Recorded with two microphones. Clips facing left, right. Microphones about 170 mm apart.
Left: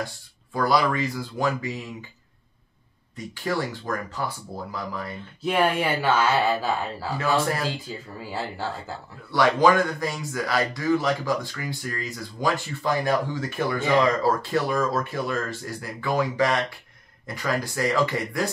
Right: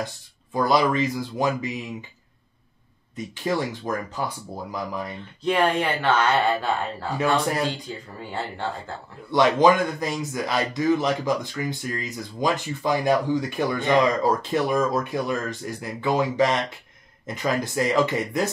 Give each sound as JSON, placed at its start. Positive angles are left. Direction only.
{"t": 0.0, "sound": "speech", "side_deg": -20}
{"t": 3.4, "sound": "speech", "side_deg": -20}
{"t": 5.4, "sound": "speech", "side_deg": 5}
{"t": 9.3, "sound": "speech", "side_deg": -20}